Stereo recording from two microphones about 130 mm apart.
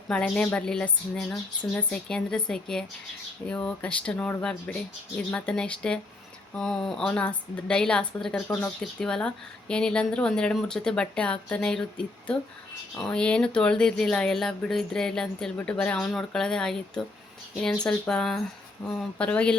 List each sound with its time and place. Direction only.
0.1 s a woman's voice: 5° left (ahead or behind)
13.0 s a woman's voice: 5° left (ahead or behind)